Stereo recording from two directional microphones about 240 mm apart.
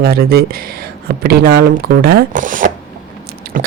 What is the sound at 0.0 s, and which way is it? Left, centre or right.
A man's voice, right.